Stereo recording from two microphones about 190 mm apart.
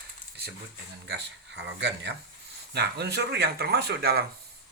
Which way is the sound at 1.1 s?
65° right (ahead or behind).